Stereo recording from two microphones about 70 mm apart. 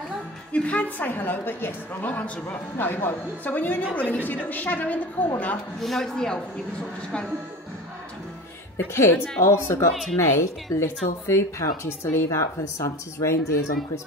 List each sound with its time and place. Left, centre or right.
0.5 s a woman's voice: centre
5.8 s a woman's voice: centre
8.7 s a woman's voice: left